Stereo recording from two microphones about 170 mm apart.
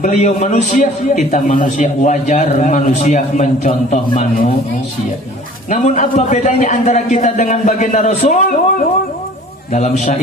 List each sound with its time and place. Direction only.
0.0 s a man's voice: 45° left (ahead or behind)
5.7 s a man's voice: 45° left (ahead or behind)